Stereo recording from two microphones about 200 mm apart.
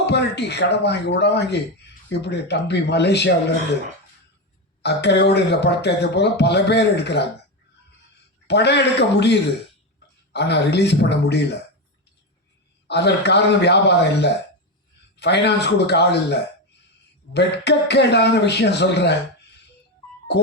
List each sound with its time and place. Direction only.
0.0 s speech: 55° left (ahead or behind)
4.8 s speech: 55° left (ahead or behind)
8.4 s speech: 55° left (ahead or behind)
12.9 s speech: 55° left (ahead or behind)